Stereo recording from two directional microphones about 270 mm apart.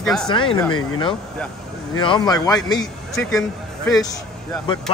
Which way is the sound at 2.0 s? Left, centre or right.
Centre.